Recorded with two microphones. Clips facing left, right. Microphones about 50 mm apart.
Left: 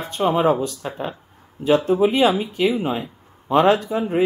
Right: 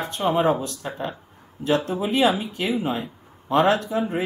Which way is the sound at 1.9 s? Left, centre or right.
Left.